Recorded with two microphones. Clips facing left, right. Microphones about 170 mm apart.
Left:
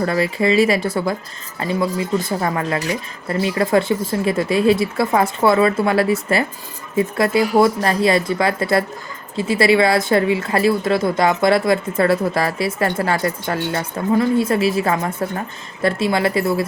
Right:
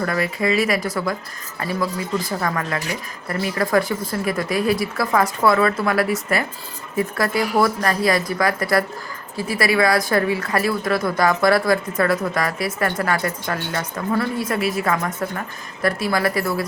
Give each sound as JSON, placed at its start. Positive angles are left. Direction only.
{"t": 0.0, "sound": "a woman's voice", "side_deg": 25}